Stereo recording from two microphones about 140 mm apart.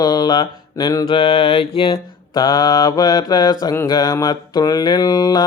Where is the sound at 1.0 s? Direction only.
45° left (ahead or behind).